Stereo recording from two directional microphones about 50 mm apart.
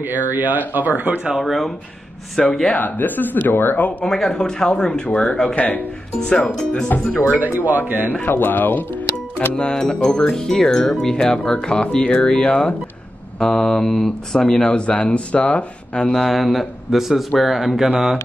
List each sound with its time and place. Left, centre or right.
0.0 s speech: right
1.1 s speech: centre
1.4 s speech: centre
2.7 s speech: left
4.0 s speech: centre
5.6 s speech: left
6.2 s speech: centre
6.9 s speech: left
7.3 s speech: right
8.1 s speech: left
9.6 s speech: centre
16.3 s speech: centre